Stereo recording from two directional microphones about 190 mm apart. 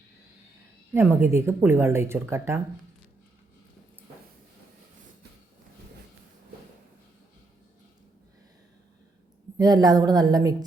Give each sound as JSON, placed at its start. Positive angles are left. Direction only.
{"t": 0.9, "sound": "speech", "side_deg": -15}
{"t": 9.6, "sound": "a woman's voice", "side_deg": -20}